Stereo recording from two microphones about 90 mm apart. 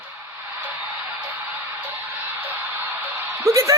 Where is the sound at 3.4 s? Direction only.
35° right (ahead or behind).